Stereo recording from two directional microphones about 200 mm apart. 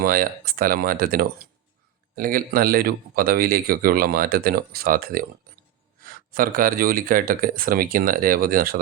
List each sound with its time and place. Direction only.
0.0 s speech: 45° right (ahead or behind)